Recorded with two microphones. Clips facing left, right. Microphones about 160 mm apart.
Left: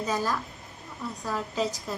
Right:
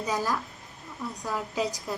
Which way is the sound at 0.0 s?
10° right (ahead or behind).